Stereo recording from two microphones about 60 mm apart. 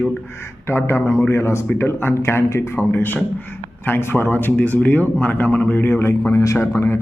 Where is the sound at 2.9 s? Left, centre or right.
Left.